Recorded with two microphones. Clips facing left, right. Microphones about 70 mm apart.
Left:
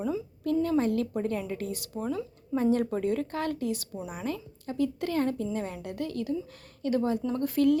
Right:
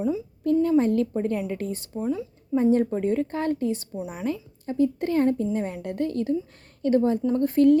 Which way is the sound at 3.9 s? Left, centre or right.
Centre.